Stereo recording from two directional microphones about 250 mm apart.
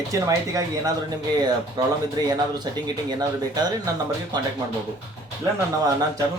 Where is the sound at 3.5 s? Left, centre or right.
Centre.